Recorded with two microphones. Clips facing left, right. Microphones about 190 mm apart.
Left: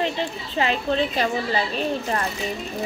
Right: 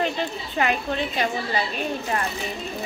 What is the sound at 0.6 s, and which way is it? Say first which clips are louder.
A woman's voice: left 2 dB; 30° left (ahead or behind).